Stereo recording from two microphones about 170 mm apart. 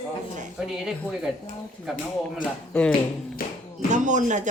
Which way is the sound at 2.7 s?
5° left (ahead or behind).